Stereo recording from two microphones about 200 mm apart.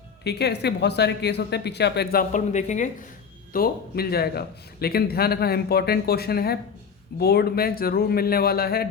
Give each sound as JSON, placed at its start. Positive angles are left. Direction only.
{"t": 0.3, "sound": "speech", "side_deg": 55}
{"t": 3.5, "sound": "a man's voice", "side_deg": 50}